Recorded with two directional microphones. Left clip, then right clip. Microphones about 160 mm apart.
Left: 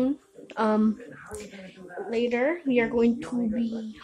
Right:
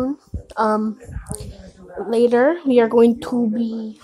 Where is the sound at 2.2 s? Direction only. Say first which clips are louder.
Right 10 dB; 40° right (ahead or behind).